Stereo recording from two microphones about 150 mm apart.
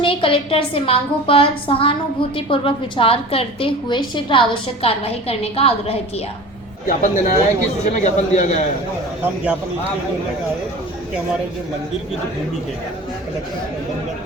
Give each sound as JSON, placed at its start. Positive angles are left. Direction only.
{"t": 0.0, "sound": "a woman's voice", "side_deg": 35}
{"t": 6.8, "sound": "a man's voice", "side_deg": 65}
{"t": 8.0, "sound": "a man's voice", "side_deg": 55}
{"t": 9.2, "sound": "speech", "side_deg": -5}